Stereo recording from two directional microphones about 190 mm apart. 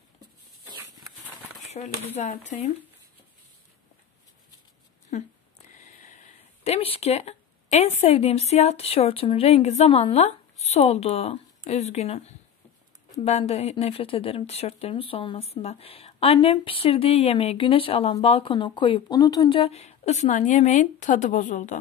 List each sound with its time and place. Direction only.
1.7 s speech: 35° left (ahead or behind)
5.1 s speech: 40° left (ahead or behind); by 19.6 s 20° left (ahead or behind)
19.6 s speech: 35° left (ahead or behind)